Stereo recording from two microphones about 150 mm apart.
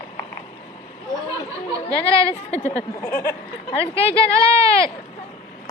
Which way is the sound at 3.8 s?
40° left (ahead or behind).